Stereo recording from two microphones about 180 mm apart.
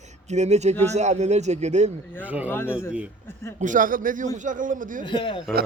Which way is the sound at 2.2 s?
10° right (ahead or behind).